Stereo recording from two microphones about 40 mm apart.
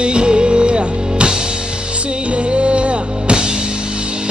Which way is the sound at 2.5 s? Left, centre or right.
Right.